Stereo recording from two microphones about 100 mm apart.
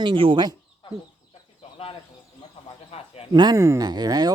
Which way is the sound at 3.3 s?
50° right (ahead or behind).